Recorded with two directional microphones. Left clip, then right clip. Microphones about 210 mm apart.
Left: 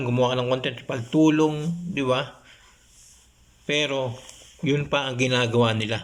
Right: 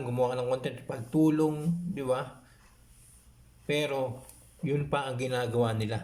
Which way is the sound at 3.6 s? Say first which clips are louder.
Left 6 dB; 15° right (ahead or behind).